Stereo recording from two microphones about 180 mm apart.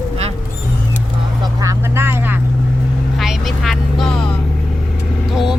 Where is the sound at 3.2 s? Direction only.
Centre (ahead or behind).